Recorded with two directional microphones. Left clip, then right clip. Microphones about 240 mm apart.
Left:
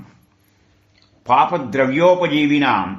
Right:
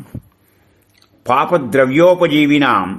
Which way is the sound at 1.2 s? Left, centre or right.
Right.